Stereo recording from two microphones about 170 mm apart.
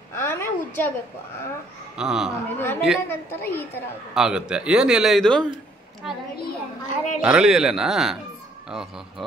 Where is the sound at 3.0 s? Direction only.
10° left (ahead or behind).